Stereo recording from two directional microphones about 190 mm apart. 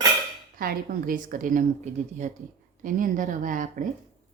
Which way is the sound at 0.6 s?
50° right (ahead or behind).